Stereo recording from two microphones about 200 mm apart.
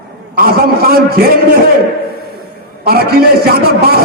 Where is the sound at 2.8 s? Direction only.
50° right (ahead or behind).